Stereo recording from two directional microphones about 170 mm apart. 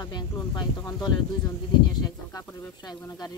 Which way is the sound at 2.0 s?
25° left (ahead or behind).